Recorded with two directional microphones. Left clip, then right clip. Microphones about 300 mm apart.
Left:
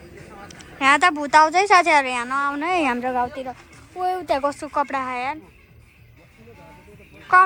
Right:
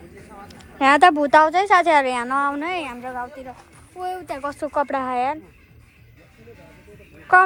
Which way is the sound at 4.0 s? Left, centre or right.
Centre.